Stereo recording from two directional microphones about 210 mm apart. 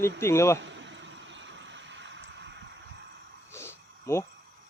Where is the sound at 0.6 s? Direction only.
60° right (ahead or behind).